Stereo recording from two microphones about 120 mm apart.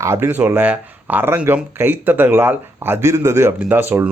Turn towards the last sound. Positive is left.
turn(degrees=-15)  # may be behind; listen again after turning